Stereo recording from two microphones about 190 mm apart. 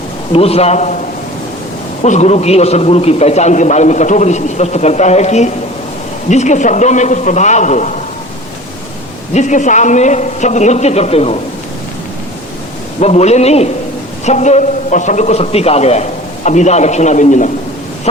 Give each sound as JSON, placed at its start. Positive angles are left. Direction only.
{"t": 0.3, "sound": "a man's voice", "side_deg": 30}
{"t": 2.0, "sound": "a man's voice", "side_deg": 35}
{"t": 9.3, "sound": "a man's voice", "side_deg": 40}
{"t": 13.0, "sound": "a man's voice", "side_deg": 35}